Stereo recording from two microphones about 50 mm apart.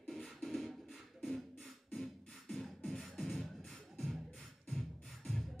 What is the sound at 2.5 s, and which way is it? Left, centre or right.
Beatboxing, centre.